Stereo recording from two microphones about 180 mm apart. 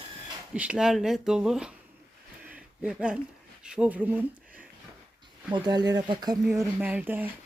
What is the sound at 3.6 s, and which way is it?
Speech, 5° right (ahead or behind).